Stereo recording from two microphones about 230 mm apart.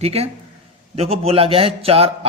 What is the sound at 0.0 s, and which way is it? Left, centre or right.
A man's voice, right.